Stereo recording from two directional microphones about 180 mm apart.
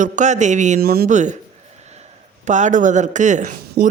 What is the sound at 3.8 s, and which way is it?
Speech, 65° right (ahead or behind).